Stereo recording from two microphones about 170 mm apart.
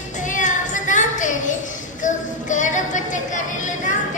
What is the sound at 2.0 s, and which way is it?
Music, 45° left (ahead or behind).